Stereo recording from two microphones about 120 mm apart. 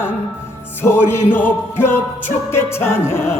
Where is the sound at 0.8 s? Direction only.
20° left (ahead or behind).